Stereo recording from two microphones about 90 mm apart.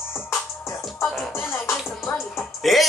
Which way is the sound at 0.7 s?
35° left (ahead or behind).